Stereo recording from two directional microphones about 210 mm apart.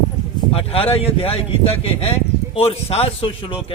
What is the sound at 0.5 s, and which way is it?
Speech, 25° left (ahead or behind).